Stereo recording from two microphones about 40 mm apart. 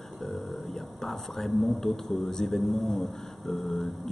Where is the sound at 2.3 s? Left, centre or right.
Centre.